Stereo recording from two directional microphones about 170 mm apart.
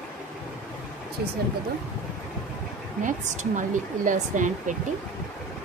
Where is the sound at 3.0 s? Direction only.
50° right (ahead or behind).